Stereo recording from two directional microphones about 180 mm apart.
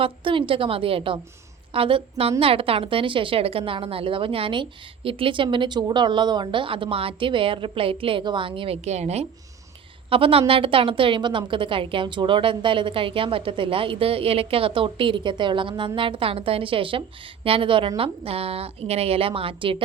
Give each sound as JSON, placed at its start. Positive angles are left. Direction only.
{"t": 0.0, "sound": "a woman's voice", "side_deg": -30}